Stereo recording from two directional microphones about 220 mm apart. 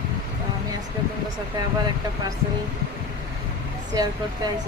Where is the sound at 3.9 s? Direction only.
15° right (ahead or behind).